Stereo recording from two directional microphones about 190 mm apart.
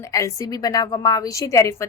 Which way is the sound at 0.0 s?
15° left (ahead or behind).